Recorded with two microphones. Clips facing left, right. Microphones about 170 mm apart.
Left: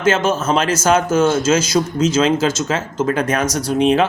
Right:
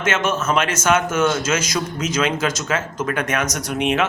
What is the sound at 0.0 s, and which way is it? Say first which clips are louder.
A man's voice: left 5 dB; 30° left (ahead or behind).